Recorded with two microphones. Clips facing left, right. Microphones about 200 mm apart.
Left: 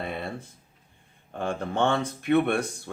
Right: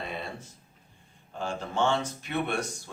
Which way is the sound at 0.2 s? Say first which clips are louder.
Left 4 dB; 55° left (ahead or behind).